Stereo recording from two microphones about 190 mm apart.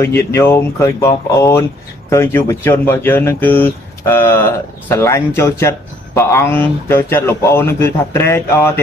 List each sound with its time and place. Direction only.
0.0 s speech: 15° left (ahead or behind)